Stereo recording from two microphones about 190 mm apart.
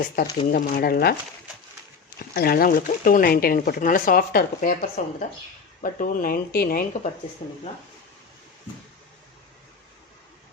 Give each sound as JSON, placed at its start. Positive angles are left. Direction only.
{"t": 0.0, "sound": "speech", "side_deg": 50}
{"t": 2.1, "sound": "speech", "side_deg": 55}